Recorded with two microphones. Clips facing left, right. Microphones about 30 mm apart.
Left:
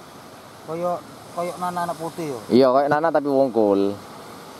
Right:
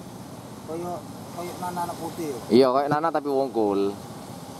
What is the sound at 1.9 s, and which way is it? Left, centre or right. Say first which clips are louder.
Speech: left 3 dB; centre.